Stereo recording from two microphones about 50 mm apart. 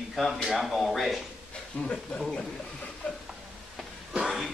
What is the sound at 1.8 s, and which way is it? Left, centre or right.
Speech, left.